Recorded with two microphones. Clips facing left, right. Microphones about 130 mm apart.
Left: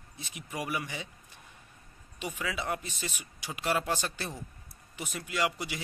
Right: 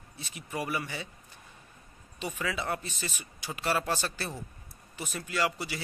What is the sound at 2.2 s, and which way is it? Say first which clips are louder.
Speech: right 1 dB; 10° left (ahead or behind).